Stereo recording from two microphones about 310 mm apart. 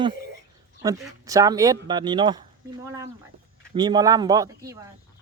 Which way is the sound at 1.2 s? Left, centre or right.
Centre.